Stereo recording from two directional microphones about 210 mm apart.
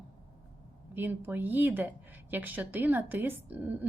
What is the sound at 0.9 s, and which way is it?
Speech, 10° right (ahead or behind).